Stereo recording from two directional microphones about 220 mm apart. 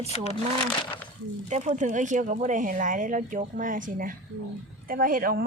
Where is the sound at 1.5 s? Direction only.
30° right (ahead or behind).